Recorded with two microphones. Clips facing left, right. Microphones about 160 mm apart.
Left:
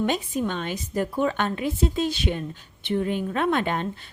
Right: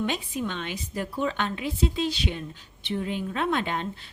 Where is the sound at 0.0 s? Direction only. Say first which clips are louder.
Left 4 dB; 45° left (ahead or behind).